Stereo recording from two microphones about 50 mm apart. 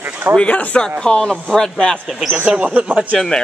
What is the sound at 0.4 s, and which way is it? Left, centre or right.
Speech, left.